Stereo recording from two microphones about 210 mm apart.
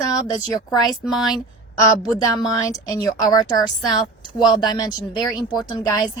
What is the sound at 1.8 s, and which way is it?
A woman's voice, 15° left (ahead or behind).